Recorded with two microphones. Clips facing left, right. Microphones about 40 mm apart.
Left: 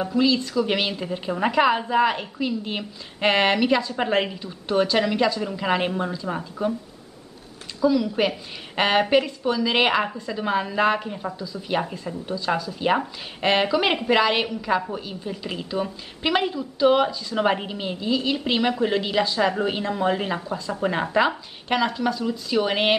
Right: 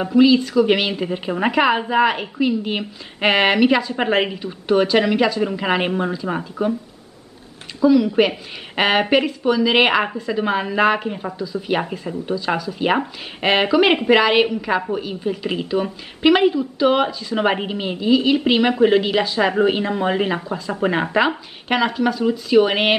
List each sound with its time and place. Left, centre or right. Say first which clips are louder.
0.0 s a woman's voice: right 7 dB; centre
7.8 s a woman's voice: right 6 dB; centre